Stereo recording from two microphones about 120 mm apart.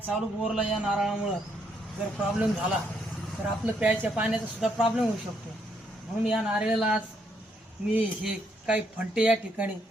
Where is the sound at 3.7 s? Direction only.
10° right (ahead or behind).